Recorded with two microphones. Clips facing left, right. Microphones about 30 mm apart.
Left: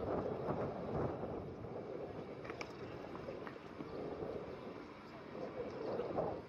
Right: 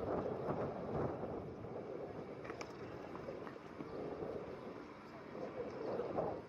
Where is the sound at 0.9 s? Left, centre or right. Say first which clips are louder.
Even; centre.